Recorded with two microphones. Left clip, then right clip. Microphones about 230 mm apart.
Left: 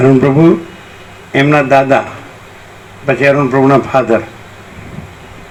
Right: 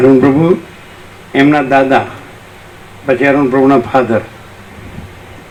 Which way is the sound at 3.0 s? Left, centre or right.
Left.